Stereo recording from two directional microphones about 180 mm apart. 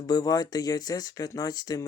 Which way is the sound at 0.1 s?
20° left (ahead or behind).